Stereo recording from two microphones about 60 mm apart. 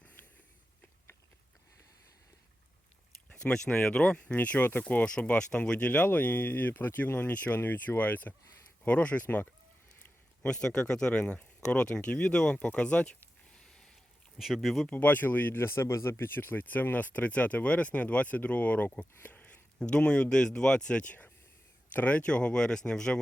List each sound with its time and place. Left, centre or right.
3.2 s speech: centre
4.4 s speech: left
10.4 s speech: centre
13.5 s a sound: centre
14.3 s speech: centre
14.9 s speech: left
15.5 s speech: left
19.2 s a sound: left
20.3 s speech: centre